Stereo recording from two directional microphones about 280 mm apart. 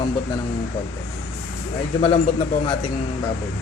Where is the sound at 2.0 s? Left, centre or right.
Centre.